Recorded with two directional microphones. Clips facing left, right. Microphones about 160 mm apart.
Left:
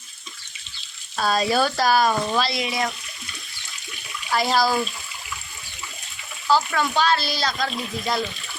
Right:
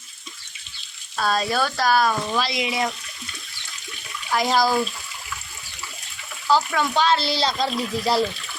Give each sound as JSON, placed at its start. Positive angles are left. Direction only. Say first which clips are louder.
{"t": 1.1, "sound": "speech", "louder": "left 2 dB", "side_deg": 0}
{"t": 2.4, "sound": "speech", "louder": "even", "side_deg": -15}
{"t": 4.4, "sound": "speech", "louder": "right 1 dB", "side_deg": -15}
{"t": 4.6, "sound": "speech", "louder": "right 1 dB", "side_deg": 0}
{"t": 6.9, "sound": "speech", "louder": "right 2 dB", "side_deg": -20}